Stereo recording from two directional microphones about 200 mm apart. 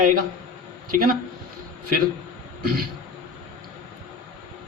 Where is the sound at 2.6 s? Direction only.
50° right (ahead or behind).